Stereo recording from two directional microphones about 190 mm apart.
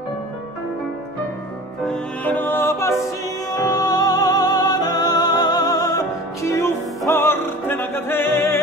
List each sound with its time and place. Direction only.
1.9 s music: 10° left (ahead or behind)